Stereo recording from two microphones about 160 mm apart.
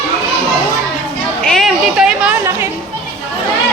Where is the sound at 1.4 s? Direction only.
Centre (ahead or behind).